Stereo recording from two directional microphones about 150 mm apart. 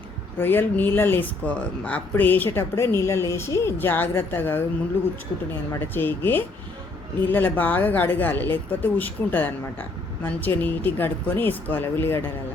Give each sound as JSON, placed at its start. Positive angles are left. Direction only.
{"t": 0.3, "sound": "speech", "side_deg": 15}
{"t": 5.8, "sound": "speech", "side_deg": 15}